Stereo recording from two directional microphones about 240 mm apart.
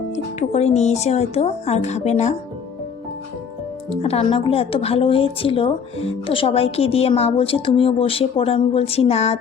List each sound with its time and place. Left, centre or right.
0.3 s a woman's voice: left
4.0 s a woman's voice: left